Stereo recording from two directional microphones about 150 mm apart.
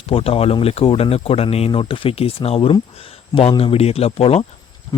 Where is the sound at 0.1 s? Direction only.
40° left (ahead or behind).